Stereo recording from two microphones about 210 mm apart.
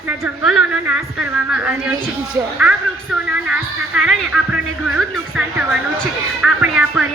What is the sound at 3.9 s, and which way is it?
Speech, centre (ahead or behind).